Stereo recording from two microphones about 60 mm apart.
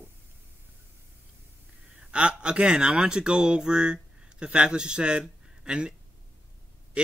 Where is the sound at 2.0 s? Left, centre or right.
Centre.